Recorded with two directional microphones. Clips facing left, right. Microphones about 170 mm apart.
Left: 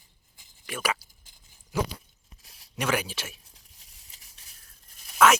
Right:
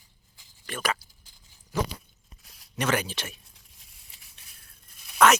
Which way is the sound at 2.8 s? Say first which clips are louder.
Right 1 dB; 5° left (ahead or behind).